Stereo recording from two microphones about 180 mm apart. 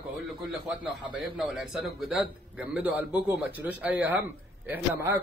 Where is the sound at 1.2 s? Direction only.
Centre (ahead or behind).